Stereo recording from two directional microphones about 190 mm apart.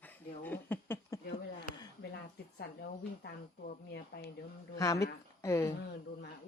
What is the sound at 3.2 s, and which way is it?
Speech, 60° left (ahead or behind).